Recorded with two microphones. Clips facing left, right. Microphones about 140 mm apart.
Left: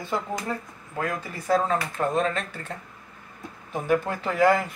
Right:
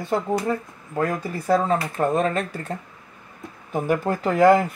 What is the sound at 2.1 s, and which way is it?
Speech, 55° right (ahead or behind).